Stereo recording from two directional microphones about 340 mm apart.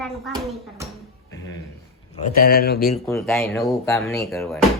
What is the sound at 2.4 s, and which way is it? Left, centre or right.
Speech, left.